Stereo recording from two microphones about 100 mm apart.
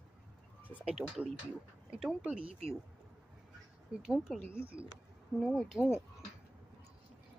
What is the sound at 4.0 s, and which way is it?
Speech, 5° right (ahead or behind).